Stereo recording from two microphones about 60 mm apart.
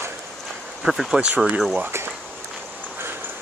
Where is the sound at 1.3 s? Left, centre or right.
Right.